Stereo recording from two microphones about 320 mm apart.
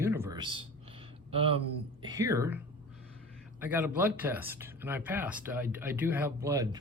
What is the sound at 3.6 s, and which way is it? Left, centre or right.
Speech, centre.